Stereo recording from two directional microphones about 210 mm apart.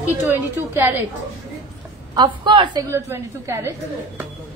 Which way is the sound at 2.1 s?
20° right (ahead or behind).